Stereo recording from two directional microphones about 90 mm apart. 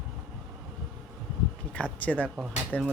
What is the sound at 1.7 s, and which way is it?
Speech, 15° left (ahead or behind).